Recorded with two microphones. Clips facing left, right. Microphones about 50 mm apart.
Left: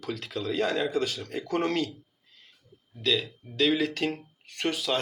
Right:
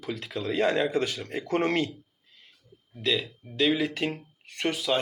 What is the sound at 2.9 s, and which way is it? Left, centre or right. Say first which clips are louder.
Speech: even; right.